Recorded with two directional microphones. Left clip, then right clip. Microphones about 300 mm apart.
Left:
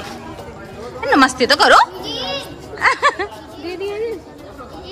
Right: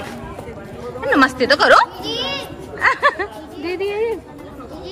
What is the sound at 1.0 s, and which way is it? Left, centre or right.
Speech, centre.